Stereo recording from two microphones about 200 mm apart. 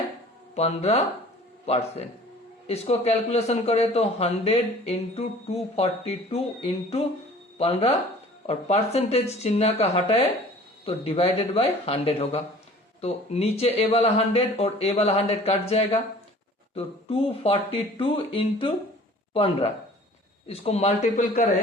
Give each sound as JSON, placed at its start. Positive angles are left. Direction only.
{"t": 0.5, "sound": "a man's voice", "side_deg": 30}
{"t": 16.7, "sound": "a man's voice", "side_deg": 30}